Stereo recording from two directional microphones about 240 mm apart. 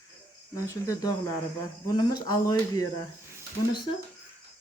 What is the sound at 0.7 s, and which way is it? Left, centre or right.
Speech, centre.